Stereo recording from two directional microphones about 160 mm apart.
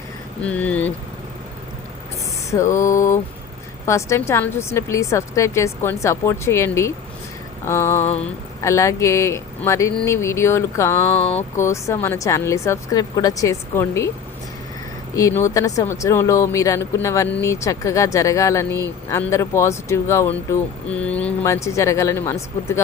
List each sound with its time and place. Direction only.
0.4 s a woman's voice: 10° left (ahead or behind)
2.5 s static: 20° left (ahead or behind)
3.8 s a woman's voice: 20° left (ahead or behind)
8.0 s mantra: 40° left (ahead or behind)
8.6 s a woman's voice: 20° left (ahead or behind)
11.2 s mantra: 40° left (ahead or behind)
11.5 s a woman's voice: 15° left (ahead or behind)
15.1 s a woman's voice: 20° left (ahead or behind)
21.4 s a woman's voice: 20° left (ahead or behind)